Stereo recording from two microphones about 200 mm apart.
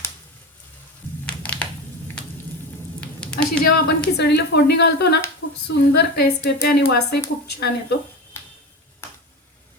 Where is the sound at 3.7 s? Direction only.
50° left (ahead or behind).